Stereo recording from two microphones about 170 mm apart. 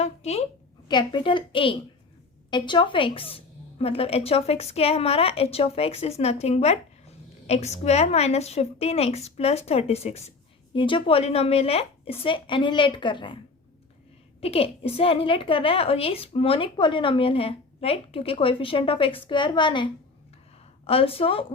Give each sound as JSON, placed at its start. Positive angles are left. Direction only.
{"t": 0.0, "sound": "a woman's voice", "side_deg": 40}
{"t": 0.9, "sound": "a woman's voice", "side_deg": 25}
{"t": 14.4, "sound": "a woman's voice", "side_deg": 35}